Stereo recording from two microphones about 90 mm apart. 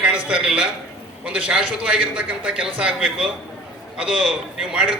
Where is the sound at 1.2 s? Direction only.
10° right (ahead or behind).